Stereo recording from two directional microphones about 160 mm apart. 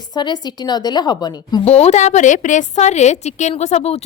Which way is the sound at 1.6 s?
40° left (ahead or behind).